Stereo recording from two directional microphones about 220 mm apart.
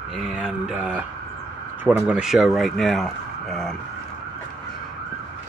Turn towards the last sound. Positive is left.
turn(degrees=0)  # may be behind; listen again after turning